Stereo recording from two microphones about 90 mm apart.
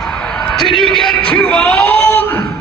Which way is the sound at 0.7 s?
5° left (ahead or behind).